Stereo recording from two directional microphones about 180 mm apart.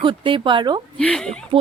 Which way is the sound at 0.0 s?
30° right (ahead or behind).